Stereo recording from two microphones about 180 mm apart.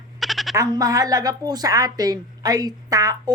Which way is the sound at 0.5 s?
20° right (ahead or behind).